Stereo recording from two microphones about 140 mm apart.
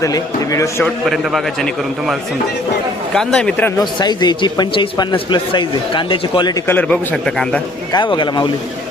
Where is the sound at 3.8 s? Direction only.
30° left (ahead or behind).